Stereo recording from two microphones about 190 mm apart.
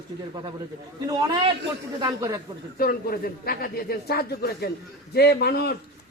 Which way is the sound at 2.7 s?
50° left (ahead or behind).